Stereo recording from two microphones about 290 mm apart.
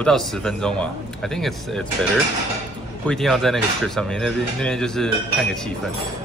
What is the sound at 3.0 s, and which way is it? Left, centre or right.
Speech, centre.